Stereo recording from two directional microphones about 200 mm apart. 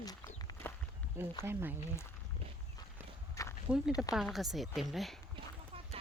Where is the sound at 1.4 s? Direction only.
10° right (ahead or behind).